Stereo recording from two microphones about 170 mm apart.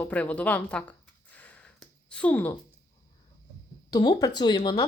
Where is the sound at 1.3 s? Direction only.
10° left (ahead or behind).